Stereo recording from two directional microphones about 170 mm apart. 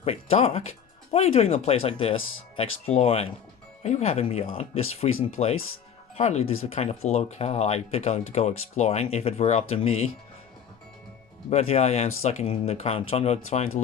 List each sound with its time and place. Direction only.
0.0 s speech: 35° left (ahead or behind)
11.4 s speech: 35° left (ahead or behind)